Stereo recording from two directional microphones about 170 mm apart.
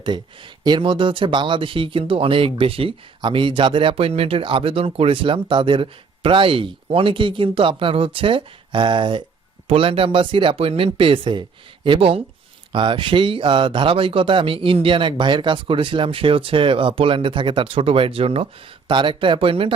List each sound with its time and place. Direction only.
0.6 s speech: 30° right (ahead or behind)